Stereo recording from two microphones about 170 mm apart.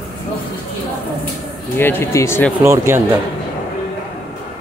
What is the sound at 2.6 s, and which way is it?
Speech, 15° right (ahead or behind).